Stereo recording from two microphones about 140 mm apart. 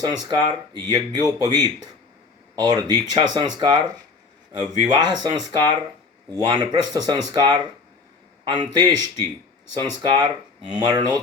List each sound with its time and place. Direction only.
0.0 s speech: 30° right (ahead or behind)